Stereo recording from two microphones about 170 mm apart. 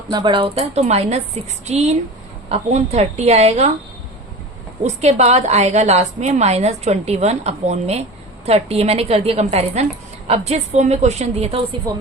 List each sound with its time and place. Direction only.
0.1 s a woman's voice: 25° right (ahead or behind)
4.8 s a woman's voice: 40° right (ahead or behind)